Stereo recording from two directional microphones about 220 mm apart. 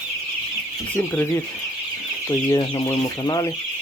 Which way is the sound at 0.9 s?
10° left (ahead or behind).